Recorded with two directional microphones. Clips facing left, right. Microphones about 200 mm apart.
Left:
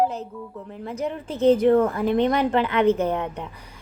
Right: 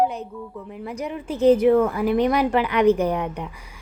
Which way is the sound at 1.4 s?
10° right (ahead or behind).